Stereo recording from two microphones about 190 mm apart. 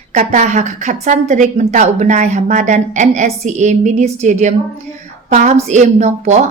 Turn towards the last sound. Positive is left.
turn(degrees=-35)  # may be behind; listen again after turning